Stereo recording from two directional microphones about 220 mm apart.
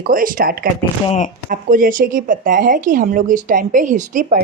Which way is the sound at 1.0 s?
30° left (ahead or behind).